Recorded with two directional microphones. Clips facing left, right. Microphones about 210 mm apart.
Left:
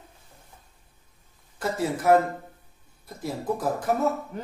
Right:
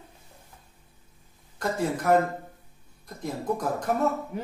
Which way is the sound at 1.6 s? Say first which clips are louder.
Even; 5° left (ahead or behind).